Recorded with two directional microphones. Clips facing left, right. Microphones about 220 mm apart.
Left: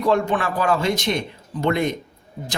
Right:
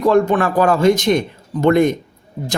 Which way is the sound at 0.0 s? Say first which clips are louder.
Right 6 dB; 45° right (ahead or behind).